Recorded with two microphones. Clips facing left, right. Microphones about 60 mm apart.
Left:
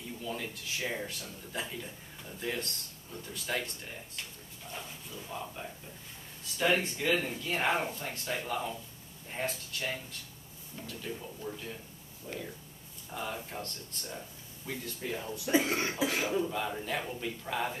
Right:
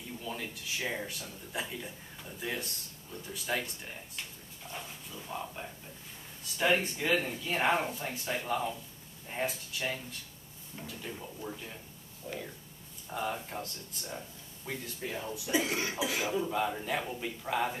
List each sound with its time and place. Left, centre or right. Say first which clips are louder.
0.2 s speech: left 2 dB; centre
12.3 s speech: even; centre
13.1 s speech: right 3 dB; centre
15.4 s speech: left 3 dB; left
16.3 s speech: right 1 dB; centre